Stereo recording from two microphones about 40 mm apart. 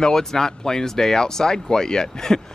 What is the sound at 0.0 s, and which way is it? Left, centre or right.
Speech, centre.